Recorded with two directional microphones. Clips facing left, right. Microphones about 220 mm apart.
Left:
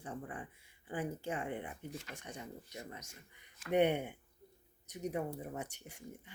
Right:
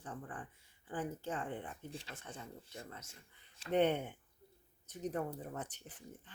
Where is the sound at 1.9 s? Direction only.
30° right (ahead or behind).